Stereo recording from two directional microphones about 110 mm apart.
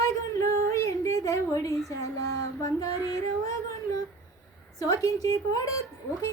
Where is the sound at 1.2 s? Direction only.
30° left (ahead or behind).